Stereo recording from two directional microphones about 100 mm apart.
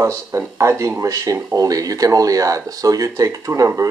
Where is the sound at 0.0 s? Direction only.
30° right (ahead or behind).